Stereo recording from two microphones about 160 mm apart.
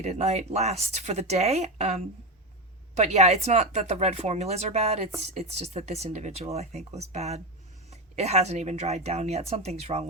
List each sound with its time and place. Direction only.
0.0 s speech: 45° right (ahead or behind)